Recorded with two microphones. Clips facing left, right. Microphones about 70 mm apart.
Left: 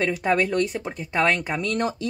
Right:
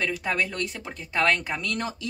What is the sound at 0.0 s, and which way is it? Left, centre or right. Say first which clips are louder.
Speech: left 6 dB; left.